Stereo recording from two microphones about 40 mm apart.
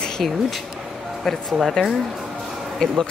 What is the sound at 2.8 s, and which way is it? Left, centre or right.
Speech, centre.